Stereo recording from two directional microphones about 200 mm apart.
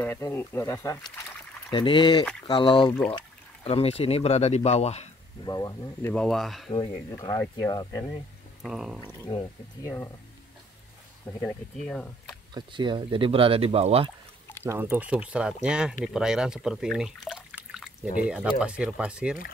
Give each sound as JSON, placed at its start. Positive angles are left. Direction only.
{"t": 0.0, "sound": "speech", "side_deg": 10}
{"t": 1.7, "sound": "speech", "side_deg": 25}
{"t": 5.4, "sound": "speech", "side_deg": 20}
{"t": 6.1, "sound": "speech", "side_deg": 0}
{"t": 6.7, "sound": "speech", "side_deg": 20}
{"t": 8.6, "sound": "speech", "side_deg": -5}
{"t": 9.3, "sound": "speech", "side_deg": 30}
{"t": 11.4, "sound": "speech", "side_deg": 5}
{"t": 12.5, "sound": "speech", "side_deg": -25}
{"t": 14.6, "sound": "speech", "side_deg": -10}